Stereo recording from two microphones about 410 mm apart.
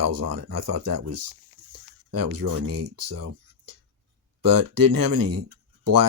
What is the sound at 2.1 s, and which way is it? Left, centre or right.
Speech, right.